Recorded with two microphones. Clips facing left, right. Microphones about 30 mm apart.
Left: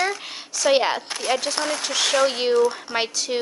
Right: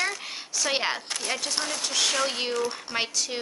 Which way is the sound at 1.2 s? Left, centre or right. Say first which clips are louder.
Left 6 dB; centre.